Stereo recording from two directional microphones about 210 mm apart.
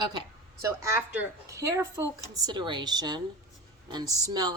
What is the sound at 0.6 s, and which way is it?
A woman's voice, 15° right (ahead or behind).